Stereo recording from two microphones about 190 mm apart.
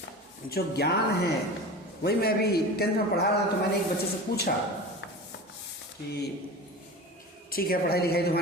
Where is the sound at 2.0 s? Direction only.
55° left (ahead or behind).